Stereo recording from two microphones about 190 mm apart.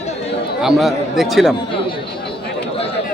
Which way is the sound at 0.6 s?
Centre (ahead or behind).